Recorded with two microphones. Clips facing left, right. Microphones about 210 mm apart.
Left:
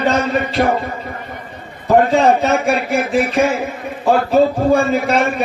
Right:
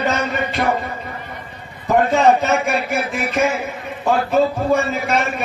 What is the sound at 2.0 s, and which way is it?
Speech, 30° left (ahead or behind).